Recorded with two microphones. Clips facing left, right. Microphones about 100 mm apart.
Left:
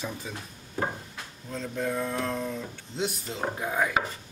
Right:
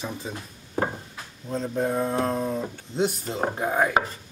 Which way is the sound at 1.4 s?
35° right (ahead or behind).